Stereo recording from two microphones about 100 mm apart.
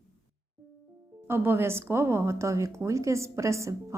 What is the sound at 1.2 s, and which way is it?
A woman's voice, 25° right (ahead or behind).